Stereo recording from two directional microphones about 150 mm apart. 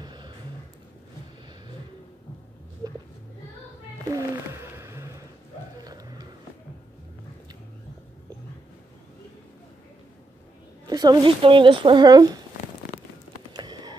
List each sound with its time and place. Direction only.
0.0 s music: 30° right (ahead or behind)
4.2 s whale vocalization: 15° right (ahead or behind)
5.8 s a sound: 25° right (ahead or behind)
10.9 s speech: 25° right (ahead or behind)
13.5 s music: 30° right (ahead or behind)